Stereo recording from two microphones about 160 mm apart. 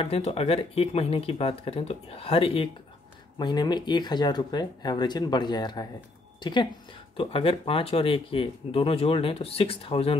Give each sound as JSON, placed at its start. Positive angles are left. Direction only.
{"t": 0.0, "sound": "speech", "side_deg": 40}